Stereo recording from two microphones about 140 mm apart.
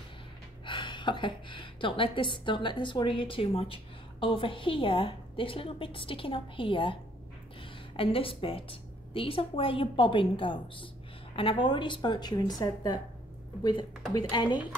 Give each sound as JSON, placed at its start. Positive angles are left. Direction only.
{"t": 0.7, "sound": "a woman's voice", "side_deg": 35}
{"t": 14.3, "sound": "a woman's voice", "side_deg": 30}